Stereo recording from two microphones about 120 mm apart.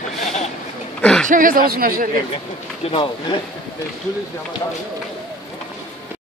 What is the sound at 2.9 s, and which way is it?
Speech, 45° left (ahead or behind).